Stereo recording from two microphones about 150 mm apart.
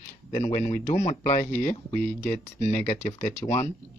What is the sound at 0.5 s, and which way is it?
Speech, 65° left (ahead or behind).